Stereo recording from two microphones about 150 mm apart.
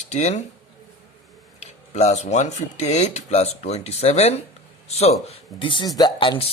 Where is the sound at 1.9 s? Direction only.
45° left (ahead or behind).